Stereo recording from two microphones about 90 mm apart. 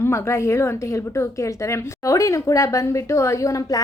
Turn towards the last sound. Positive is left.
turn(degrees=35)  # may be behind; listen again after turning